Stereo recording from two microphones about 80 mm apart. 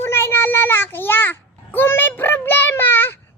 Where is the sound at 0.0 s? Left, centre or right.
Left.